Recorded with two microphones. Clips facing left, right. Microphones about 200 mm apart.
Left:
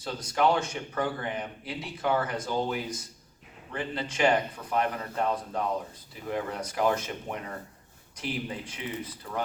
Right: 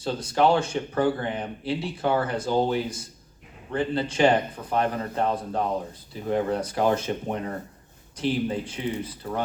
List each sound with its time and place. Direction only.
0.0 s speech: 30° right (ahead or behind)